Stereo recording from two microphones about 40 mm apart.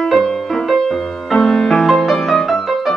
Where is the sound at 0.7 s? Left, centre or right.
Centre.